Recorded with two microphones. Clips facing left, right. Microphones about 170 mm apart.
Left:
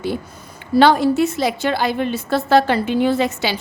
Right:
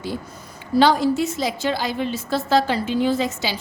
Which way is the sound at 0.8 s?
60° left (ahead or behind).